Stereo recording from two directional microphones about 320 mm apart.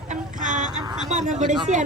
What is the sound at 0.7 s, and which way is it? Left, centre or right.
Speech, centre.